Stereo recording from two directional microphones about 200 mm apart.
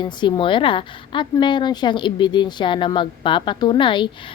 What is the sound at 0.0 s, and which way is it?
A woman's voice, 25° left (ahead or behind).